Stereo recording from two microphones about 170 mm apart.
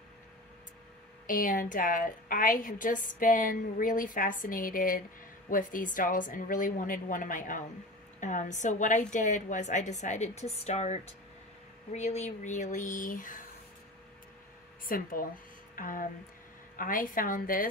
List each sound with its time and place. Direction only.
1.2 s a woman's voice: 50° left (ahead or behind)
14.9 s speech: 55° left (ahead or behind)
15.7 s a sound: 55° left (ahead or behind)
16.7 s a woman's voice: 55° left (ahead or behind)